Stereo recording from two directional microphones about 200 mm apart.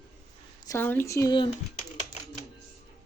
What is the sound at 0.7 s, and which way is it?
Speech, 10° left (ahead or behind).